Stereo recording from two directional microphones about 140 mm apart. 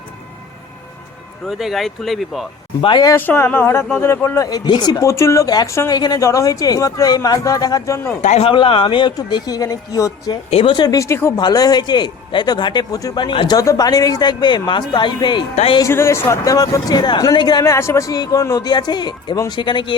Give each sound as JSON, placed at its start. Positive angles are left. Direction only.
{"t": 1.5, "sound": "speech", "side_deg": 0}
{"t": 2.8, "sound": "a man's voice", "side_deg": 35}
{"t": 3.1, "sound": "speech", "side_deg": 15}
{"t": 4.4, "sound": "speech", "side_deg": 30}
{"t": 8.2, "sound": "speech", "side_deg": 55}
{"t": 8.4, "sound": "a man's voice", "side_deg": 40}
{"t": 10.5, "sound": "a man's voice", "side_deg": 40}
{"t": 10.8, "sound": "a man's voice", "side_deg": 20}
{"t": 13.6, "sound": "a man's voice", "side_deg": 25}
{"t": 15.9, "sound": "speech", "side_deg": 20}